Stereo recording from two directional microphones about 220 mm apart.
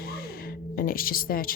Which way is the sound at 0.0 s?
45° left (ahead or behind).